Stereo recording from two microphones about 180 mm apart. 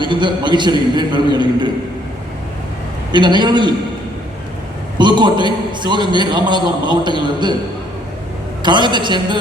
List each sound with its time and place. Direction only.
0.0 s a man's voice: 25° right (ahead or behind)
3.1 s a man's voice: 25° right (ahead or behind)
4.9 s a man's voice: 25° right (ahead or behind)
8.6 s a man's voice: 25° right (ahead or behind)